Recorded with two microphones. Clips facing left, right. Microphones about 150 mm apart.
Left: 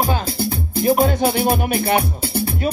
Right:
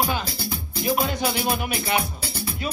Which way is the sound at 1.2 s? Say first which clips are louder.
Left 7 dB; 55° left (ahead or behind).